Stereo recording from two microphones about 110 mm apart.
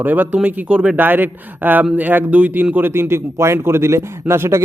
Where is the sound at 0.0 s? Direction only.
15° right (ahead or behind).